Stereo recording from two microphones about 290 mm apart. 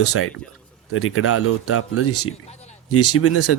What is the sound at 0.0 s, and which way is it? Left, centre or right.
A man's voice, left.